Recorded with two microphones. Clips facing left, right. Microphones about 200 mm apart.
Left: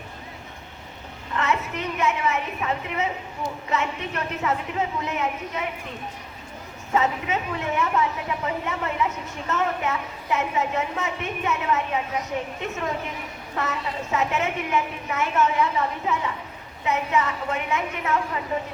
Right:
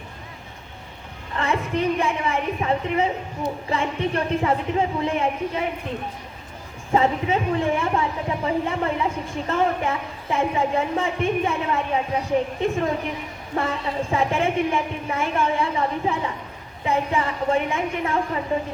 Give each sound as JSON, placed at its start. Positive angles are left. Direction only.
{"t": 1.4, "sound": "a woman's voice", "side_deg": -30}
{"t": 6.9, "sound": "speech", "side_deg": -30}